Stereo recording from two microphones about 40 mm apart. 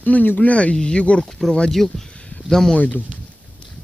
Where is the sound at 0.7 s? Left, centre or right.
Left.